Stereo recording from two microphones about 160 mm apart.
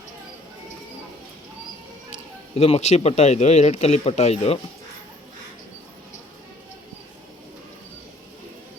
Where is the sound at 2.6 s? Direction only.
45° left (ahead or behind).